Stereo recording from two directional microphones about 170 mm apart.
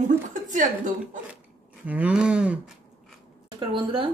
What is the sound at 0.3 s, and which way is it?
Speech, 50° right (ahead or behind).